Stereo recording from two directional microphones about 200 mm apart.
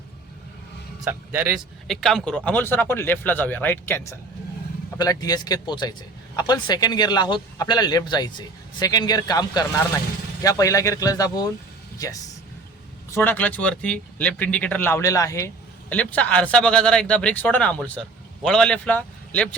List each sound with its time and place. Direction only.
1.3 s a man's voice: 10° right (ahead or behind); by 19.5 s 5° left (ahead or behind)